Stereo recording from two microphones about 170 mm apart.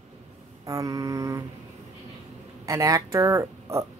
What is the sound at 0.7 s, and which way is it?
Mantra, 20° right (ahead or behind).